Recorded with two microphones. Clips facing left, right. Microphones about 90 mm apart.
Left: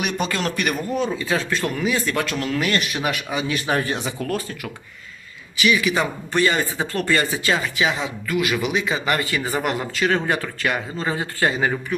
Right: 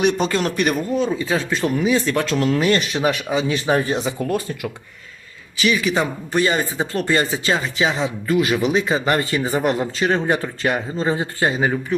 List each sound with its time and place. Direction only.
0.0 s speech: 25° right (ahead or behind)
3.8 s speech: 20° right (ahead or behind)
5.5 s speech: 35° right (ahead or behind)
5.9 s speech: 25° right (ahead or behind)